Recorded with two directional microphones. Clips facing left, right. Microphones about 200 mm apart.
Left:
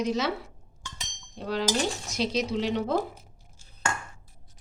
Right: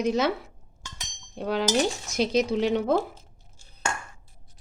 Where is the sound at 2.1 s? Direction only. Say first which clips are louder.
Right 5 dB; 50° right (ahead or behind).